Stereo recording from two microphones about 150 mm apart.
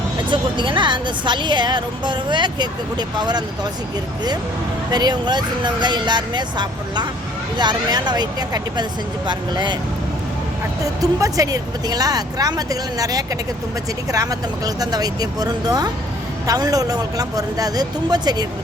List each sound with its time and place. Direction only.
0.3 s a woman's voice: 30° right (ahead or behind)
4.9 s speech: 30° right (ahead or behind)
11.0 s speech: 25° right (ahead or behind)